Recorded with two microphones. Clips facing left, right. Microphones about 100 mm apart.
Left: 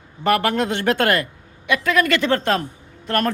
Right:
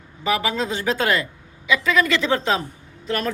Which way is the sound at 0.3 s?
60° left (ahead or behind).